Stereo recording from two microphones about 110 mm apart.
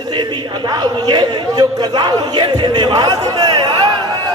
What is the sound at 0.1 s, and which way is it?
A man's voice, 40° right (ahead or behind).